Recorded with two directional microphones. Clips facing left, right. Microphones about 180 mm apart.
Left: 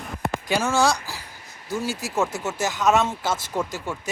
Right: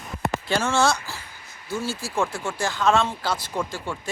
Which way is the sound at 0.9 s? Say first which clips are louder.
Even; 35° left (ahead or behind).